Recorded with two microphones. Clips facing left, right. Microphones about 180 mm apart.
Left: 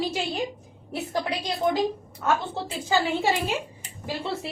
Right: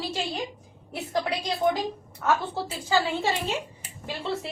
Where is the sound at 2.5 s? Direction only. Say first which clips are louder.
Even; 15° left (ahead or behind).